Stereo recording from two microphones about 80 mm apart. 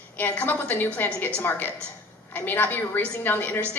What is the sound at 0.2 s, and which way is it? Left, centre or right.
A woman's voice, left.